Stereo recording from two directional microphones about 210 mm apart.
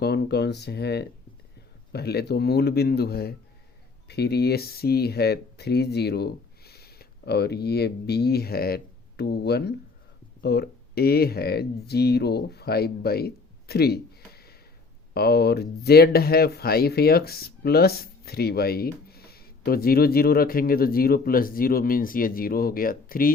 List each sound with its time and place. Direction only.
0.0 s speech: 50° left (ahead or behind)